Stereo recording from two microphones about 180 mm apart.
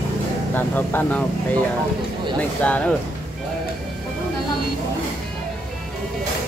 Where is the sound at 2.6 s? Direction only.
10° left (ahead or behind).